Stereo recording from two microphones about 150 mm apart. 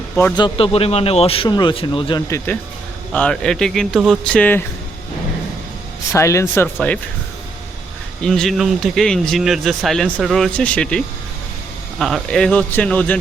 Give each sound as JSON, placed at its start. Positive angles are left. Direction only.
{"t": 0.3, "sound": "a man's voice", "side_deg": 35}
{"t": 3.1, "sound": "speech", "side_deg": 5}
{"t": 6.1, "sound": "speech", "side_deg": 20}
{"t": 8.2, "sound": "speech", "side_deg": 5}